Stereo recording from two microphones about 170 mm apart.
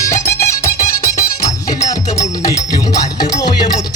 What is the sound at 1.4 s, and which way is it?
Music, 20° left (ahead or behind).